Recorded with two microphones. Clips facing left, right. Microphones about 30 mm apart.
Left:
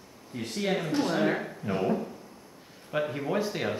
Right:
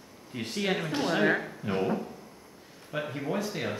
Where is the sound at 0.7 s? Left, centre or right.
Centre.